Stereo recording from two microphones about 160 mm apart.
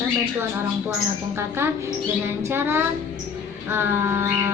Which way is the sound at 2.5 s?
15° right (ahead or behind).